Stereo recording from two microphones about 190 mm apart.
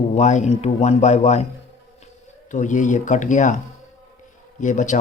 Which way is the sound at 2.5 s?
40° left (ahead or behind).